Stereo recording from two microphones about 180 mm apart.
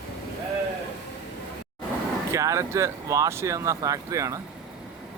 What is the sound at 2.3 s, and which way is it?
Speech, 15° right (ahead or behind).